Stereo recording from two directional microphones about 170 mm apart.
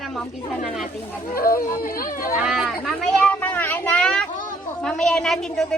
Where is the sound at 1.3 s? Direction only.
60° left (ahead or behind).